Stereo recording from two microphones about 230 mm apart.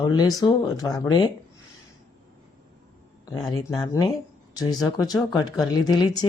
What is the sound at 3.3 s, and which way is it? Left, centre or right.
Speech, centre.